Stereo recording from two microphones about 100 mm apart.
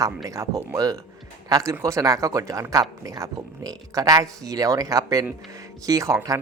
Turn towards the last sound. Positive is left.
turn(degrees=-35)  # may be behind; listen again after turning